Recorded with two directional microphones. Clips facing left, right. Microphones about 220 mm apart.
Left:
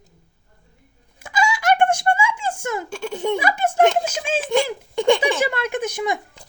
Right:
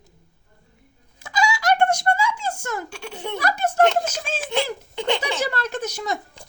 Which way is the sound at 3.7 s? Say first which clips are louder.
Left 1 dB; 10° left (ahead or behind).